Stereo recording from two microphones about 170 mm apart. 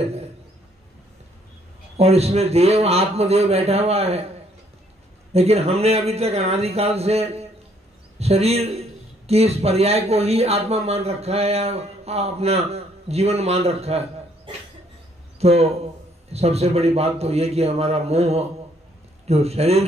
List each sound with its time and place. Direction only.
0.0 s a sound: 35° right (ahead or behind)
2.0 s speech: 35° right (ahead or behind)
5.3 s speech: 40° right (ahead or behind)